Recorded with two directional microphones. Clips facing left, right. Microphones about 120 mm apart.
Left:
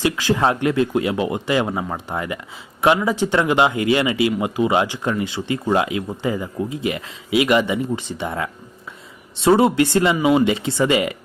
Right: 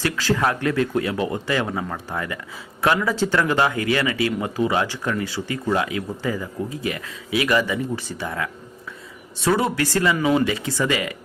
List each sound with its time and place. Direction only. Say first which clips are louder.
0.0 s speech: left 3 dB; 15° left (ahead or behind)
10.2 s speech: left 3 dB; 15° left (ahead or behind)